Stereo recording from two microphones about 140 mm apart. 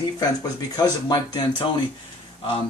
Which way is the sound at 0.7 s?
30° left (ahead or behind).